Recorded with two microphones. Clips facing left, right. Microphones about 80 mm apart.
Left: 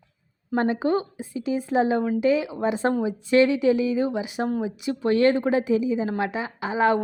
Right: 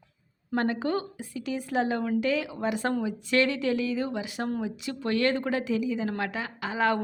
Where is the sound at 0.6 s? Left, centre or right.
Left.